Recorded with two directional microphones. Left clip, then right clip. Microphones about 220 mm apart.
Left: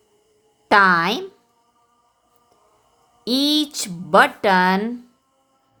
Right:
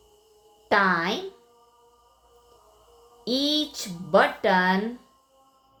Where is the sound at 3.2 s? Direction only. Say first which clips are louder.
Left 5 dB; 35° left (ahead or behind).